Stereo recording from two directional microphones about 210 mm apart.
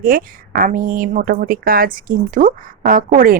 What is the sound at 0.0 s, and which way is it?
Speech, 40° right (ahead or behind).